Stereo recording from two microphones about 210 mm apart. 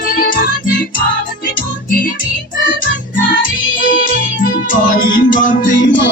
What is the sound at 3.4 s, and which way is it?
Music, 40° left (ahead or behind).